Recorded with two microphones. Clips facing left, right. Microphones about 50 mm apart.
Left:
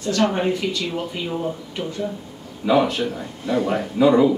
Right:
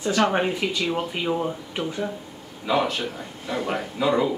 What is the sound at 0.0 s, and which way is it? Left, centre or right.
Speech, centre.